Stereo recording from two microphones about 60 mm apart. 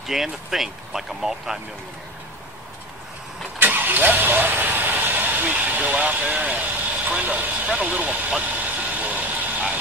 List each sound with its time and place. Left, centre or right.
0.0 s speech: centre
3.5 s vehicle: right